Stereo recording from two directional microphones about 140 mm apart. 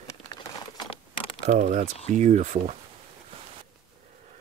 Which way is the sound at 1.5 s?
60° right (ahead or behind).